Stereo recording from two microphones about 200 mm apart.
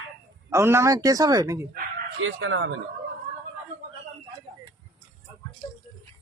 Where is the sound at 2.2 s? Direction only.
80° right.